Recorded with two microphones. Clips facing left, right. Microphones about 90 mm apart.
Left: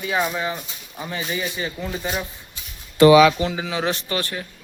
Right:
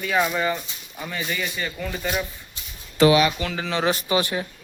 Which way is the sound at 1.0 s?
25° left (ahead or behind).